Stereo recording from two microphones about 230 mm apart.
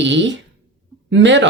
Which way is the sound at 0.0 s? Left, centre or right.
Right.